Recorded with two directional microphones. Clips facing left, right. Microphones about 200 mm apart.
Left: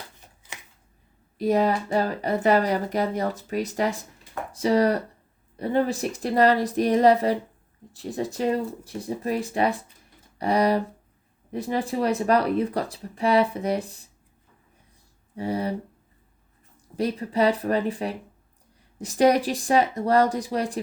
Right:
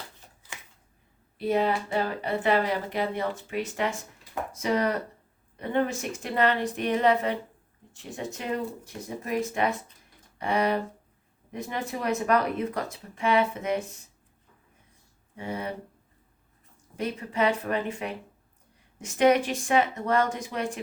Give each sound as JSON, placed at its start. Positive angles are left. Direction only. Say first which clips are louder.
{"t": 1.4, "sound": "speech", "louder": "left 4 dB", "side_deg": 40}
{"t": 15.4, "sound": "speech", "louder": "left 6 dB", "side_deg": 35}
{"t": 17.0, "sound": "speech", "louder": "left 4 dB", "side_deg": 35}